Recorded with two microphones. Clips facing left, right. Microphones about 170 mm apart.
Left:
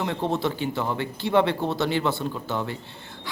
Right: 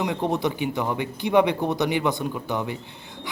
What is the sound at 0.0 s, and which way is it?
A man's voice, 15° right (ahead or behind).